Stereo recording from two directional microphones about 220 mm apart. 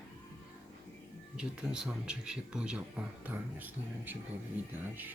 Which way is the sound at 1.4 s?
5° right (ahead or behind).